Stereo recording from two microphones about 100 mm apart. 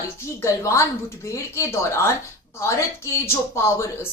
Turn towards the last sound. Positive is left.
turn(degrees=30)  # may be behind; listen again after turning